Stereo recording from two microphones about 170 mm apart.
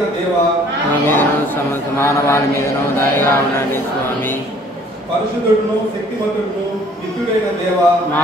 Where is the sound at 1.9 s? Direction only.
15° left (ahead or behind).